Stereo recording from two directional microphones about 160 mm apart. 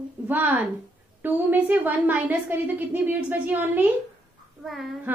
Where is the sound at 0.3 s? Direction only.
10° right (ahead or behind).